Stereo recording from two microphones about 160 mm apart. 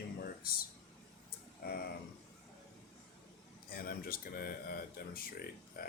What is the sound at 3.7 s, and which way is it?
Speech, 65° left (ahead or behind).